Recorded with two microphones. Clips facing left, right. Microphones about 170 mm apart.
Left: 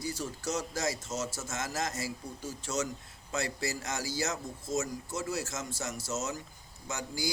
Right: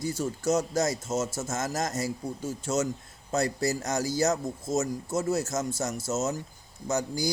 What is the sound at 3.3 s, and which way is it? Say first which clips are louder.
A man's voice: right 7 dB; 45° right (ahead or behind).